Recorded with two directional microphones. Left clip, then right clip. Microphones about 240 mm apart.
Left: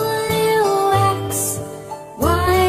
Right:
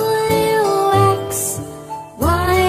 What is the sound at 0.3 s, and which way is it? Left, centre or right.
Music, left.